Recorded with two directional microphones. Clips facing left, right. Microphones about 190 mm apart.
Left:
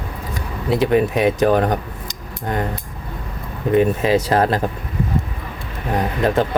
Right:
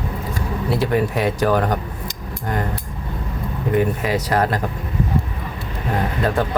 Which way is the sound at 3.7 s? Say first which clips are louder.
Left 4 dB; 25° left (ahead or behind).